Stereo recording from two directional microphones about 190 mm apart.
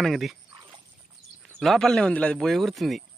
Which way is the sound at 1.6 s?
Centre (ahead or behind).